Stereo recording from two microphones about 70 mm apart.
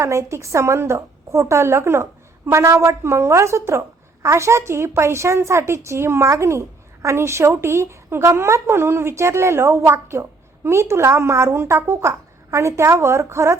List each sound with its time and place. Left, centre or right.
0.0 s a woman's voice: right